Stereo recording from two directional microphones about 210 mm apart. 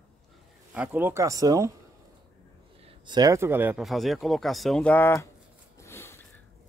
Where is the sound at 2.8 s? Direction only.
25° right (ahead or behind); by 5.3 s 10° left (ahead or behind).